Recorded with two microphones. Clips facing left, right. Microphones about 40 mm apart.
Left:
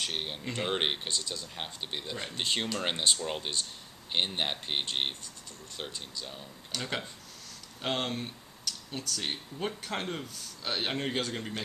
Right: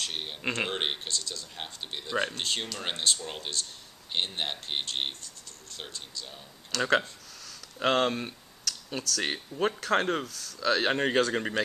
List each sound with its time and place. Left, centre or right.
0.0 s speech: centre
0.4 s speech: right
0.7 s speech: centre
6.7 s speech: right